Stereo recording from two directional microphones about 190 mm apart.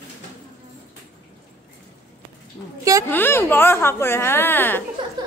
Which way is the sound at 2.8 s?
15° right (ahead or behind).